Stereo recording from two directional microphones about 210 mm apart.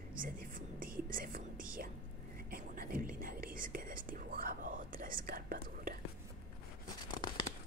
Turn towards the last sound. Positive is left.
turn(degrees=20)  # may be behind; listen again after turning